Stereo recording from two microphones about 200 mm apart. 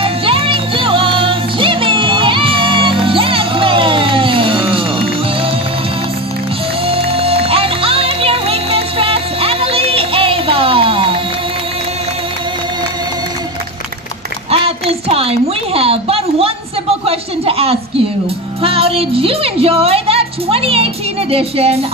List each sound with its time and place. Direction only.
0.0 s music: 30° right (ahead or behind)
6.9 s music: 30° right (ahead or behind)
14.5 s a sound: 30° right (ahead or behind)
18.6 s music: 30° right (ahead or behind)